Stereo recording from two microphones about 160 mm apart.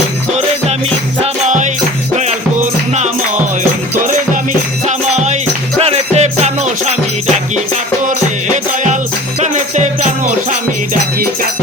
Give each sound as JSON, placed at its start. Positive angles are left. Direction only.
{"t": 1.2, "sound": "music", "side_deg": -50}
{"t": 4.9, "sound": "music", "side_deg": -45}
{"t": 9.4, "sound": "music", "side_deg": -50}